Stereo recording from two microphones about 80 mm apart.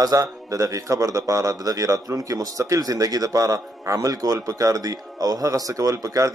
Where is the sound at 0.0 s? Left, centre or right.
Right.